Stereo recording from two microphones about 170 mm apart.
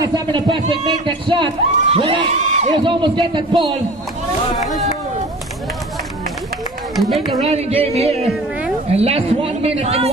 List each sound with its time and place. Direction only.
0.0 s a man's voice: 25° right (ahead or behind)
7.4 s a woman's voice: 40° right (ahead or behind)